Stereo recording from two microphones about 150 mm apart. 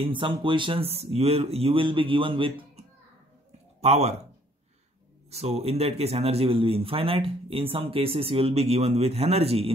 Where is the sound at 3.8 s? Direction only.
45° right (ahead or behind).